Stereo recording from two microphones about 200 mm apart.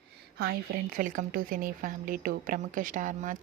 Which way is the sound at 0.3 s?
50° right (ahead or behind).